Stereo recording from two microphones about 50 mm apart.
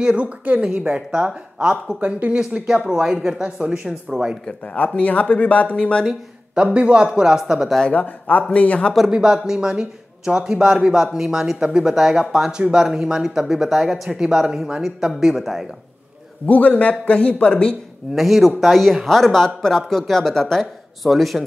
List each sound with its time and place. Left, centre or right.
0.0 s a woman's voice: right
4.7 s speech: left
6.5 s a woman's voice: right
7.1 s speech: centre
7.9 s speech: left
9.0 s speech: centre
16.4 s a man's voice: left
18.1 s speech: centre